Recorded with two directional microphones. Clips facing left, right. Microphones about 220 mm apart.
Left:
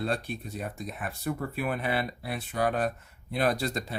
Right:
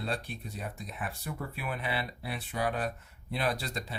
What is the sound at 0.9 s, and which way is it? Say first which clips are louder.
Speech: left 6 dB; 50° left (ahead or behind).